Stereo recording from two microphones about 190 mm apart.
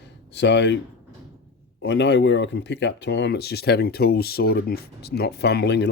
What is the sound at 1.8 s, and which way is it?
Speech, 65° left (ahead or behind).